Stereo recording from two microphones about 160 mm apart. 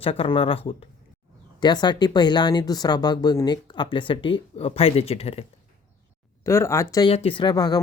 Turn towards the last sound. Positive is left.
turn(degrees=25)  # may be behind; listen again after turning